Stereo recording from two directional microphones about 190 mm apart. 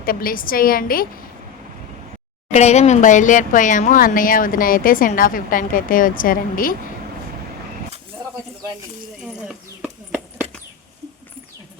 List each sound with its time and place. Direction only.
0.0 s speech: 50° left (ahead or behind)
2.5 s speech: 35° left (ahead or behind)
9.2 s a sound: 5° right (ahead or behind)